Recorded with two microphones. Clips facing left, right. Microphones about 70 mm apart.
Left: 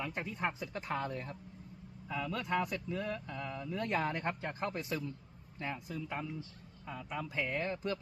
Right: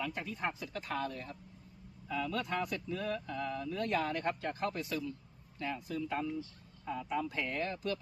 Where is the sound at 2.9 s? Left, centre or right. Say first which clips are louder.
Right 1 dB; centre.